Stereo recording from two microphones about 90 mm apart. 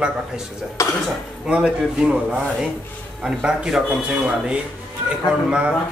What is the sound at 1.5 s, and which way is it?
Speech, 10° right (ahead or behind).